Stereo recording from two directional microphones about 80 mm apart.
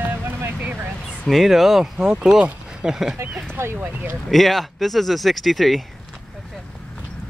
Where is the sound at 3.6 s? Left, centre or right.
Right.